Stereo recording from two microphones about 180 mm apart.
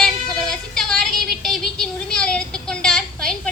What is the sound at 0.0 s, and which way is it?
Music, centre (ahead or behind).